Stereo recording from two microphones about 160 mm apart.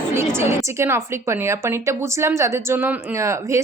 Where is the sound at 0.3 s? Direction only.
15° right (ahead or behind).